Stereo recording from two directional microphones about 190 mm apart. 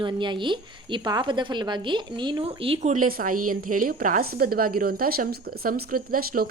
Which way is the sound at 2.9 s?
45° right (ahead or behind).